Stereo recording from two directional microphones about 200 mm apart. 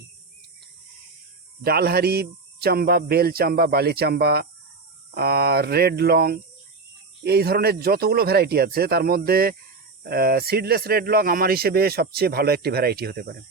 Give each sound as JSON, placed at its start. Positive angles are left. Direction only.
{"t": 1.6, "sound": "speech", "side_deg": -50}